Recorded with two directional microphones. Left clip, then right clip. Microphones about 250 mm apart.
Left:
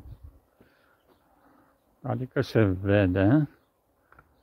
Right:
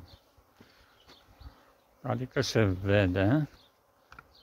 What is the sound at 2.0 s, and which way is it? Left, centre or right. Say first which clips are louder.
Speech: left 1 dB; centre.